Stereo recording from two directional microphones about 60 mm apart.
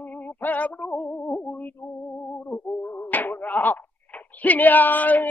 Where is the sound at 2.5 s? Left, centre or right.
Left.